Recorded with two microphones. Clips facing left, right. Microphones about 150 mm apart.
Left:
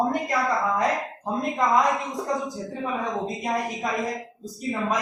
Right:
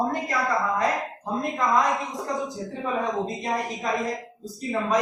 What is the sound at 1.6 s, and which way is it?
Speech, 20° left (ahead or behind).